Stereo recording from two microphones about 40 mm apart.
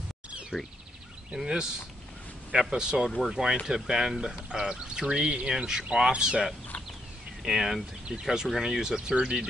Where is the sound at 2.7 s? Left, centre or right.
Centre.